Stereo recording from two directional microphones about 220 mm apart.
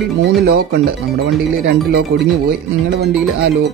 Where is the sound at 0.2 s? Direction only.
45° right (ahead or behind).